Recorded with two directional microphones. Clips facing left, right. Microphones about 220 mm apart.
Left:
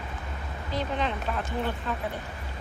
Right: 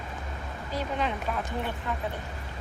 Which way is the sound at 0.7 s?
10° right (ahead or behind).